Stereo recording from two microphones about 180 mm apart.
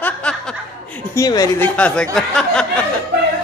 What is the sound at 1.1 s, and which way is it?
Speech, 20° left (ahead or behind).